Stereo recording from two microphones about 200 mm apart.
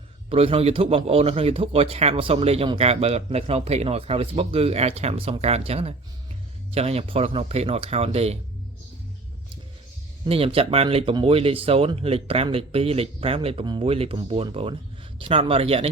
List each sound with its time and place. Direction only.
0.3 s a man's voice: 30° right (ahead or behind)
10.2 s a man's voice: 30° right (ahead or behind)